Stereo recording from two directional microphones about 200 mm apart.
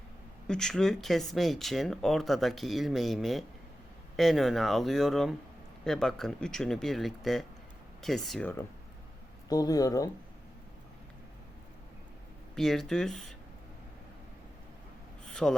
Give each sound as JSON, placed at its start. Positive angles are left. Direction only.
{"t": 0.4, "sound": "speech", "side_deg": 5}
{"t": 9.5, "sound": "speech", "side_deg": 20}
{"t": 12.5, "sound": "speech", "side_deg": 0}
{"t": 15.3, "sound": "gasp", "side_deg": 0}